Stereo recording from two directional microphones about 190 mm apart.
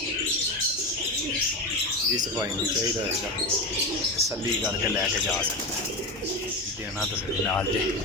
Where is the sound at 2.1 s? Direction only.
20° right (ahead or behind).